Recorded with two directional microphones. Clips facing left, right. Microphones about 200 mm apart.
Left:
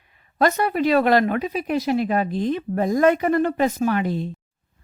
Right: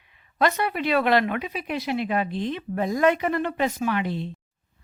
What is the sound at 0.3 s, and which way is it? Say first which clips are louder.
Speech: left 4 dB; 40° left (ahead or behind).